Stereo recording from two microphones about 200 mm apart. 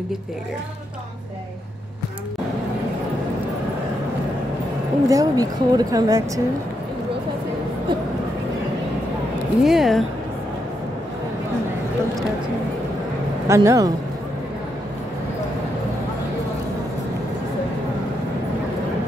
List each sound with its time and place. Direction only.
5.0 s a woman's voice: 15° right (ahead or behind)
9.6 s speech: centre (ahead or behind)
13.5 s a woman's voice: 15° right (ahead or behind)